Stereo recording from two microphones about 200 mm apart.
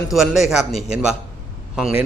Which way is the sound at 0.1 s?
Centre (ahead or behind).